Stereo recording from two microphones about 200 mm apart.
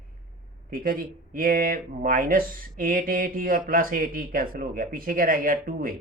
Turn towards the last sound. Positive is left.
turn(degrees=-45)  # may be behind; listen again after turning